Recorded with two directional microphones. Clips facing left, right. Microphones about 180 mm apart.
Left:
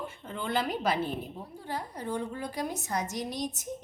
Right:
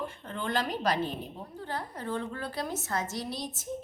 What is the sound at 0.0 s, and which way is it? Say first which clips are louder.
A woman's voice: right 1 dB; 5° left (ahead or behind).